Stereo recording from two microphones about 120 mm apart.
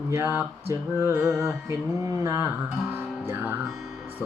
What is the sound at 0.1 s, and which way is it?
Music, 20° right (ahead or behind).